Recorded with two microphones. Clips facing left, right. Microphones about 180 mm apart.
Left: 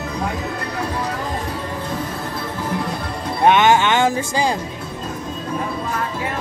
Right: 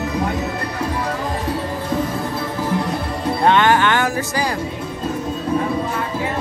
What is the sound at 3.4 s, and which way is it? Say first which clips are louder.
Speech: left 1 dB; 20° left (ahead or behind).